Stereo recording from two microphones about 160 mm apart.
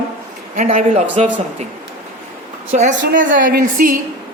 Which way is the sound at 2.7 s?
50° right (ahead or behind).